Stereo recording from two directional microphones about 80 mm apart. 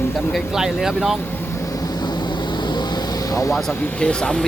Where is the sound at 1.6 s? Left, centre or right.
Left.